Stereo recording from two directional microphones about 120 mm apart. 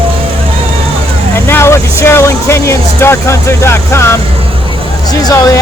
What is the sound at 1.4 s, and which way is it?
Speech, 20° left (ahead or behind).